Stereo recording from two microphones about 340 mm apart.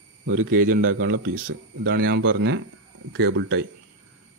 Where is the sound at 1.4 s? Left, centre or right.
Right.